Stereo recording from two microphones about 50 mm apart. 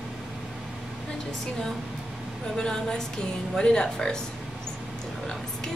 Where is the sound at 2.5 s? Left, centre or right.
Centre.